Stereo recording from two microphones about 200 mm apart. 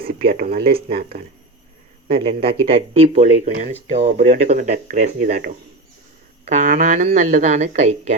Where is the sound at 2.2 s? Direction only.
25° right (ahead or behind).